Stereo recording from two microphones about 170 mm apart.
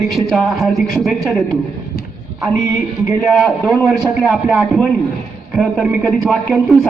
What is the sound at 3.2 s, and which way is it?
A man's voice, centre (ahead or behind).